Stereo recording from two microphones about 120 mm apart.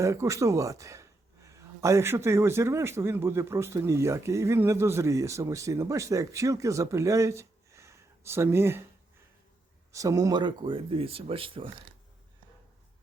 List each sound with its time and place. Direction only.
0.0 s a man's voice: 25° right (ahead or behind)
9.9 s a man's voice: 25° right (ahead or behind)
10.4 s speech: 40° right (ahead or behind)